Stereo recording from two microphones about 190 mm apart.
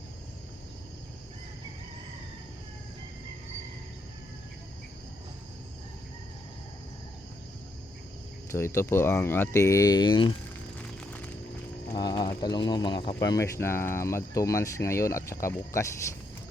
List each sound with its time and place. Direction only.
8.5 s speech: 15° left (ahead or behind)
11.0 s music: 10° left (ahead or behind)
11.9 s speech: 20° left (ahead or behind)